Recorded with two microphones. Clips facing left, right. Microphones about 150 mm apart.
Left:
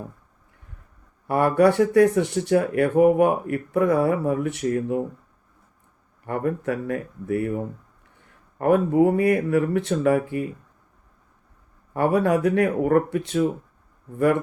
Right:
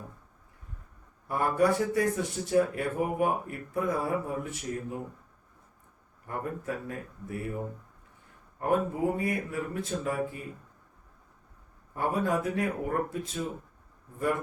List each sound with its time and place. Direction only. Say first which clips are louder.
1.3 s speech: left 8 dB; 75° left (ahead or behind)
6.2 s speech: left 9 dB; 75° left (ahead or behind)
8.5 s speech: left 10 dB; 70° left (ahead or behind)
11.9 s speech: left 8 dB; 75° left (ahead or behind)